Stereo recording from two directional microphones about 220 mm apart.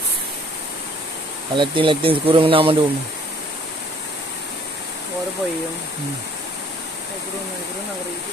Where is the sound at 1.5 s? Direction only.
20° right (ahead or behind).